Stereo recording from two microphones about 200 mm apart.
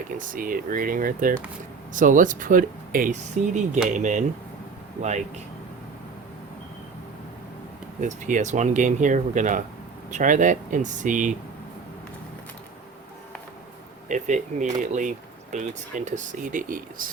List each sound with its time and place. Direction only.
0.2 s speech: 45° right (ahead or behind)
8.0 s speech: 35° right (ahead or behind)
14.1 s speech: 40° right (ahead or behind)